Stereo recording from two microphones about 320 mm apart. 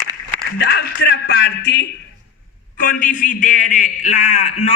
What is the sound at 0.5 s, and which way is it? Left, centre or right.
A man's voice, left.